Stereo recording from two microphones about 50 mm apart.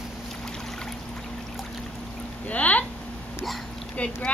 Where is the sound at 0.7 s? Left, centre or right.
Centre.